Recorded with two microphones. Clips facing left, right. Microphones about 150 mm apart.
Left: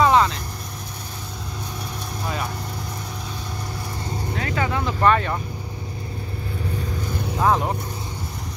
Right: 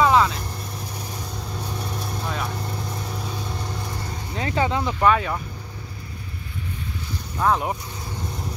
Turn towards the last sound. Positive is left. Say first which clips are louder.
# left 1 dB
turn(degrees=0)  # may be behind; listen again after turning